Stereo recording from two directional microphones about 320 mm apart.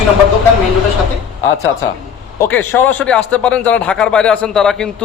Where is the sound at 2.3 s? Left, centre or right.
Centre.